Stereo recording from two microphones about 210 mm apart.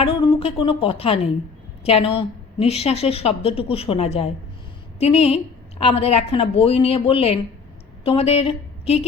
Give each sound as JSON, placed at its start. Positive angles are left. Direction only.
{"t": 0.0, "sound": "a woman's voice", "side_deg": 25}